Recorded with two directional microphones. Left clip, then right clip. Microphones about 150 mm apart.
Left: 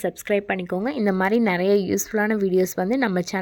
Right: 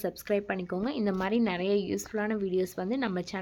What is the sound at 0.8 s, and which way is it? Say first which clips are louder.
Speech: left 9 dB; 45° left (ahead or behind).